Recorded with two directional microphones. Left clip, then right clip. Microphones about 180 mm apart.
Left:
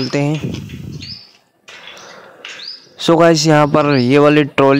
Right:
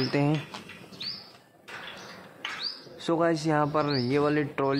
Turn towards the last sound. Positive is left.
turn(degrees=60)  # may be behind; listen again after turning